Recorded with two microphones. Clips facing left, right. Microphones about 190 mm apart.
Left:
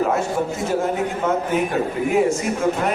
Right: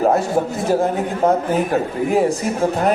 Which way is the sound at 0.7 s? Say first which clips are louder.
Right 6 dB; 35° right (ahead or behind).